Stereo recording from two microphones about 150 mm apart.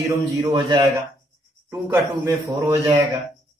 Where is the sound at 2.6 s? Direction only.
20° right (ahead or behind).